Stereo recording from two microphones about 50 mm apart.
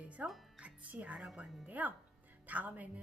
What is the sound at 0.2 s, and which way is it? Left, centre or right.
Music, right.